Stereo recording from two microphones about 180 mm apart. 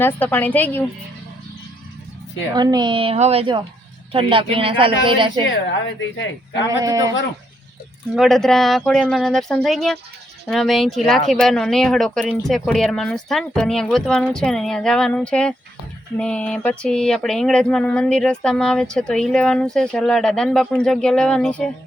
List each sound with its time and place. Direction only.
0.0 s a woman's voice: 10° left (ahead or behind)
2.6 s a woman's voice: 25° right (ahead or behind)
5.5 s speech: 90° left
6.7 s a woman's voice: 20° right (ahead or behind)
8.1 s speech: centre (ahead or behind)